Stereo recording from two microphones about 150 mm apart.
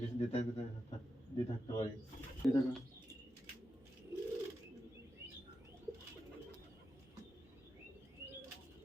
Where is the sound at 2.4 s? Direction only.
10° left (ahead or behind).